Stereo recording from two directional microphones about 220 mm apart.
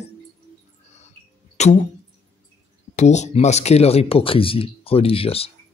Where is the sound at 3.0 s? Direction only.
30° left (ahead or behind).